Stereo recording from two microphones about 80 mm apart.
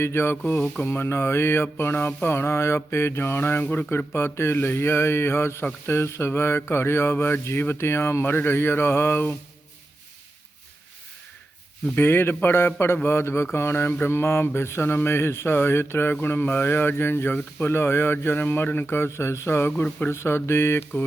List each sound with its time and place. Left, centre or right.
0.0 s mantra: left
11.9 s mantra: left
19.7 s mantra: centre
20.1 s mantra: left